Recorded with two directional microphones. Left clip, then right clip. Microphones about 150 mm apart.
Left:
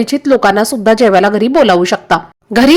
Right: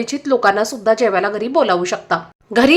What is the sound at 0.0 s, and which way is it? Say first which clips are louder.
A woman's voice: left 5 dB; 35° left (ahead or behind).